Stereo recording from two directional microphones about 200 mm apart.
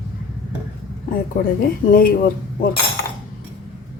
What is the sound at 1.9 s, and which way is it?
Speech, 45° left (ahead or behind).